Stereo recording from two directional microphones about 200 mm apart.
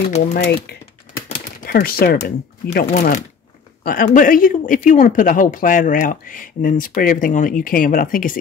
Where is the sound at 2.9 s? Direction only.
35° left (ahead or behind).